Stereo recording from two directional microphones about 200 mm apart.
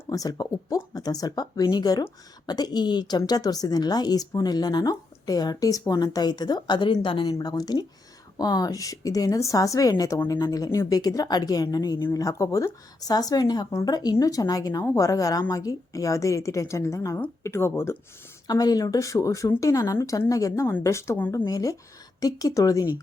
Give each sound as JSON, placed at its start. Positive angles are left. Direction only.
{"t": 0.1, "sound": "a woman's voice", "side_deg": 20}